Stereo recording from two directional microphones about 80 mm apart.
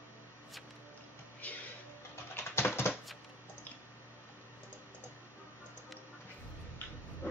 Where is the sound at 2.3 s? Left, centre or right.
Left.